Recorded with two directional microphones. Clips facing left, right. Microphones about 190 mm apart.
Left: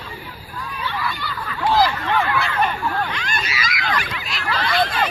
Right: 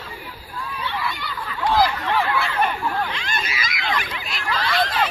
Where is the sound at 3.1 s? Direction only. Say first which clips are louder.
Left 1 dB; 25° right (ahead or behind).